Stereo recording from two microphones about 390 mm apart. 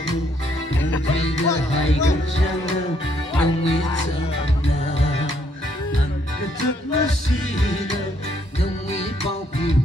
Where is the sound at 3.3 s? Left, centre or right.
Centre.